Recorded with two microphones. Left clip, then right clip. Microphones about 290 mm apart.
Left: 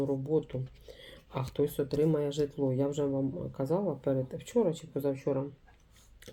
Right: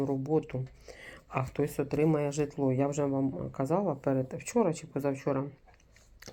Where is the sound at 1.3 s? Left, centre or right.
Centre.